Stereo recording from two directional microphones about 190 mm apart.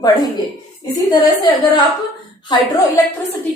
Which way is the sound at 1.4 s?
20° left (ahead or behind).